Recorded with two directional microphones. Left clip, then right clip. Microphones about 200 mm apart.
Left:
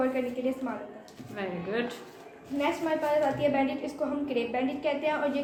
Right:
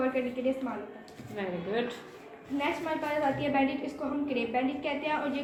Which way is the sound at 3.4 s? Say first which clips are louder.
Left 2 dB; 25° left (ahead or behind).